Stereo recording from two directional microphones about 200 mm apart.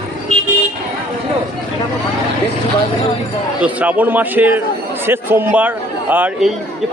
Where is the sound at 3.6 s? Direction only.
5° right (ahead or behind).